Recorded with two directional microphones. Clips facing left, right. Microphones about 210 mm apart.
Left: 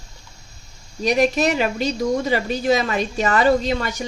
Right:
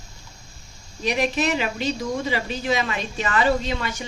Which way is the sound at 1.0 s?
40° left (ahead or behind).